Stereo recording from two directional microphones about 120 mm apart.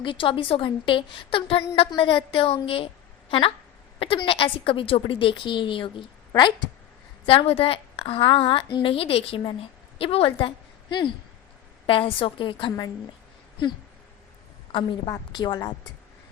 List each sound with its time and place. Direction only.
0.0 s a woman's voice: 45° left (ahead or behind)
14.7 s a woman's voice: 40° left (ahead or behind)